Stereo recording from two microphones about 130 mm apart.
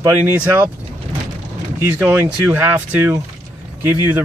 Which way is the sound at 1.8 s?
10° right (ahead or behind).